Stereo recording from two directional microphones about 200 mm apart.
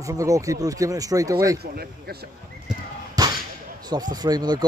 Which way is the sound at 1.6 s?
50° right (ahead or behind).